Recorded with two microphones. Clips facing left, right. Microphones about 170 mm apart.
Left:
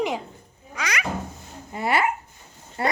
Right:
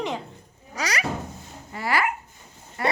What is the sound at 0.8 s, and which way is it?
Speech, 35° right (ahead or behind).